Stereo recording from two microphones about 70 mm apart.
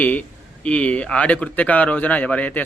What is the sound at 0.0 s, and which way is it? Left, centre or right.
Speech, left.